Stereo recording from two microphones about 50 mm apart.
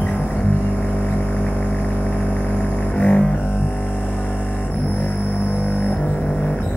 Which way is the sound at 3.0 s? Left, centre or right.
Left.